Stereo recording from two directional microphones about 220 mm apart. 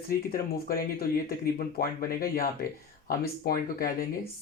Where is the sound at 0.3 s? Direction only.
40° left (ahead or behind).